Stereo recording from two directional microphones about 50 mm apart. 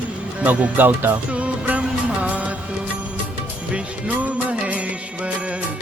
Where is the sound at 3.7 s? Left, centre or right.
Right.